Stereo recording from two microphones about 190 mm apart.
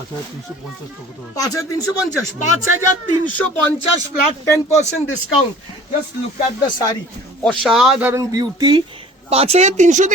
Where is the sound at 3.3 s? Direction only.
10° left (ahead or behind).